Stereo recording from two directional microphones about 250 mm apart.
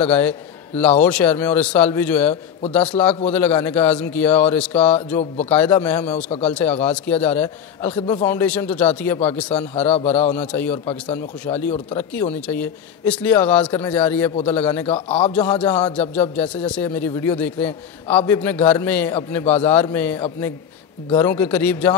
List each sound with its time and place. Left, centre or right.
0.0 s a man's voice: centre
14.9 s a man's voice: left
15.6 s a man's voice: centre